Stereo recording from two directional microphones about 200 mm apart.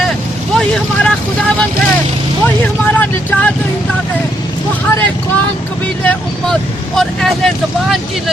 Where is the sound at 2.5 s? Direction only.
10° left (ahead or behind).